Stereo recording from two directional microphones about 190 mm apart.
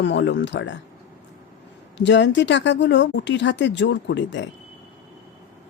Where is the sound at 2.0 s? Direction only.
70° left (ahead or behind).